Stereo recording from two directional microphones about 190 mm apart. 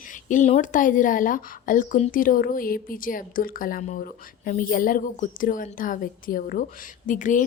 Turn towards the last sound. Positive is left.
turn(degrees=40)  # may be behind; listen again after turning